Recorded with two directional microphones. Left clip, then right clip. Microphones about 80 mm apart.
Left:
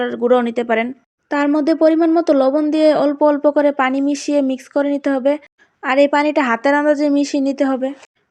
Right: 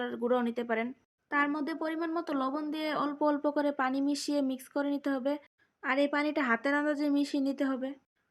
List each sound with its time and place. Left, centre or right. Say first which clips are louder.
0.0 s a woman's voice: left 15 dB; left